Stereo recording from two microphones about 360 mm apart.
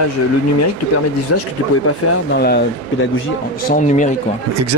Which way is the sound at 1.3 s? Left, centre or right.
Left.